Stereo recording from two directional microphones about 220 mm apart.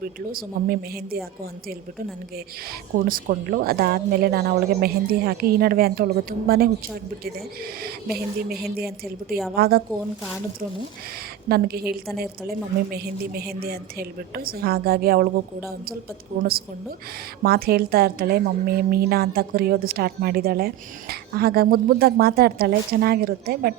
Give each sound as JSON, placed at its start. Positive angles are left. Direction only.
{"t": 0.0, "sound": "speech", "side_deg": -40}
{"t": 3.1, "sound": "a woman's voice", "side_deg": -40}
{"t": 8.4, "sound": "a woman's voice", "side_deg": -45}
{"t": 11.4, "sound": "a woman's voice", "side_deg": -45}
{"t": 16.4, "sound": "a woman's voice", "side_deg": -40}